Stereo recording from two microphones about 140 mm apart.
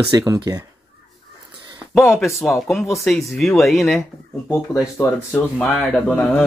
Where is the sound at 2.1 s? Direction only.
Centre (ahead or behind).